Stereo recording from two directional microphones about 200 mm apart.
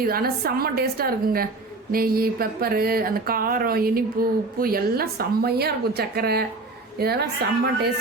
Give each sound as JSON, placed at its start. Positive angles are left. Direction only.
{"t": 0.0, "sound": "speech", "side_deg": -50}